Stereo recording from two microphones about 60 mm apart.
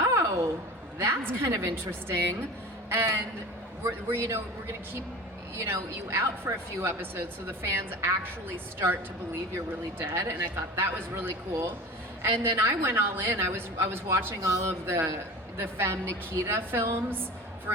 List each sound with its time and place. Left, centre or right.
0.0 s a sound: right
0.9 s a woman's voice: right
5.6 s a woman's voice: right
10.0 s a woman's voice: right
10.5 s a woman's voice: right